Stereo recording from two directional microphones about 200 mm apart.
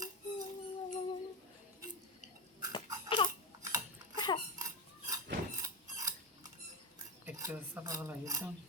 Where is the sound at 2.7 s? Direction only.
25° left (ahead or behind).